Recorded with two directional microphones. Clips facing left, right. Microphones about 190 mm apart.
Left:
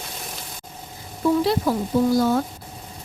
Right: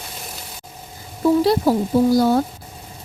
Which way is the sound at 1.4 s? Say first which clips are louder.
Right 4 dB; 35° right (ahead or behind).